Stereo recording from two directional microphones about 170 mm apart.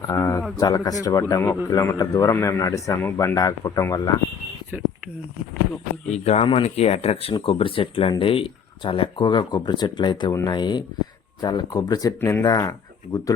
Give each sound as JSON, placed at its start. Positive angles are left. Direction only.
{"t": 0.1, "sound": "a sound", "side_deg": 20}
{"t": 0.6, "sound": "a man's voice", "side_deg": 20}
{"t": 4.7, "sound": "speech", "side_deg": -10}
{"t": 6.1, "sound": "speech", "side_deg": 40}